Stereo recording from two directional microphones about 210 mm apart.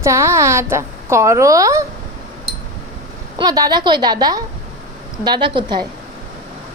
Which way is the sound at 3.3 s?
20° right (ahead or behind).